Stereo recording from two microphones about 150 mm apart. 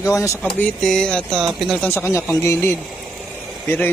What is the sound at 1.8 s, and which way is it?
Speech, 15° left (ahead or behind).